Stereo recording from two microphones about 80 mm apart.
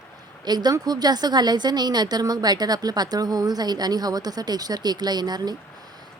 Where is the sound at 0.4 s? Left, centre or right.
Right.